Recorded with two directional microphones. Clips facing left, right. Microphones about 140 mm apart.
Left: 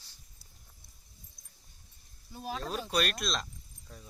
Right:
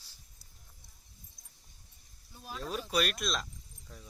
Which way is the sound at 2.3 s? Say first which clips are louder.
Left 6 dB; 90° left.